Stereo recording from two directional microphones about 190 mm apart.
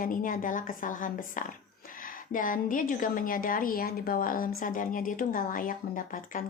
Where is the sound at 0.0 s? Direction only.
45° left (ahead or behind).